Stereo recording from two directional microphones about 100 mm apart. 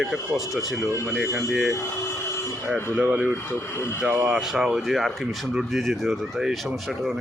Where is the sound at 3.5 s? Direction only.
25° left (ahead or behind).